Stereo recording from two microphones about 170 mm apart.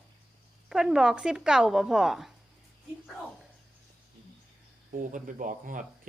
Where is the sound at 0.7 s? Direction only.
5° right (ahead or behind).